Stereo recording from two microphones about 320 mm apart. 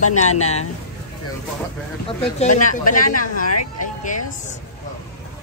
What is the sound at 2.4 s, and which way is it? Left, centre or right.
Speech, left.